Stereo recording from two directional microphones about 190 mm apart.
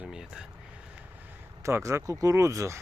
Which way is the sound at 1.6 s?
15° right (ahead or behind).